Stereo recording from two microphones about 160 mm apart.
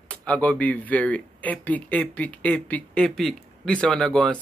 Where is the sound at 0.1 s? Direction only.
10° left (ahead or behind).